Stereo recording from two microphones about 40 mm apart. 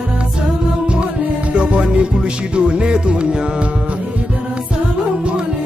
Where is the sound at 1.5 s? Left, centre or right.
Right.